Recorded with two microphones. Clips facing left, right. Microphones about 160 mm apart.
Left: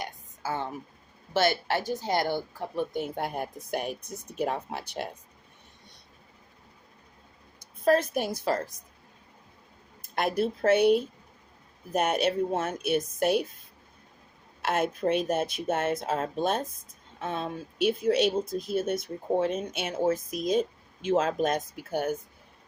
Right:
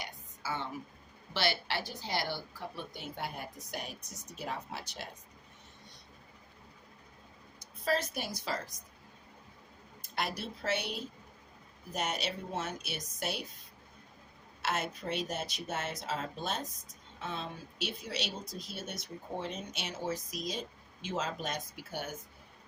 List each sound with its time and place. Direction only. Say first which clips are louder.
0.0 s a sound: left 7 dB; 45° left (ahead or behind)
1.3 s speech: left 8 dB; 45° left (ahead or behind)
7.6 s a woman's voice: left 9 dB; 50° left (ahead or behind)
10.2 s speech: left 11 dB; 50° left (ahead or behind)
14.6 s speech: left 9 dB; 55° left (ahead or behind)